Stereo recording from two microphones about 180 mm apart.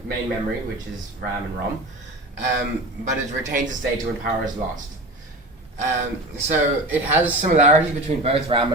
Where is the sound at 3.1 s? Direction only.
45° right (ahead or behind).